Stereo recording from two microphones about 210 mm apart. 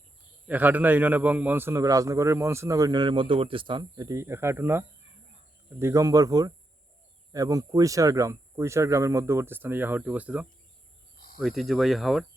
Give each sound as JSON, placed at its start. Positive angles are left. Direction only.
{"t": 0.4, "sound": "a man's voice", "side_deg": -5}